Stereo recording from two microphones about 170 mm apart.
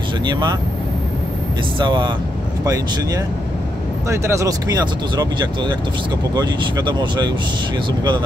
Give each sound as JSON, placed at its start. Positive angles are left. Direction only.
{"t": 1.8, "sound": "speech", "side_deg": -25}
{"t": 4.1, "sound": "speech", "side_deg": -15}